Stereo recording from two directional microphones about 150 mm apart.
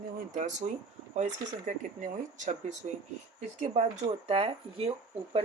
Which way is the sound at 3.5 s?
45° right (ahead or behind).